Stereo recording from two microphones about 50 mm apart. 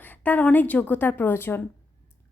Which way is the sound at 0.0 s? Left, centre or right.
Left.